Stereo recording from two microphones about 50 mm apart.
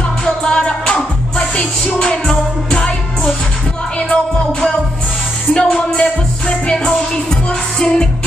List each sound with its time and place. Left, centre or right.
0.2 s music: centre
5.5 s music: centre